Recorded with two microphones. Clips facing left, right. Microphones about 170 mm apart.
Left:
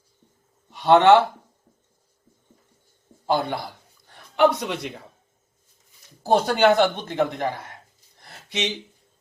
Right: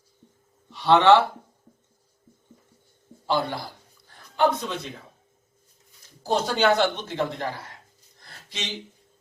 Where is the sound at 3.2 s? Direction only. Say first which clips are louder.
Left 2 dB; 50° left (ahead or behind).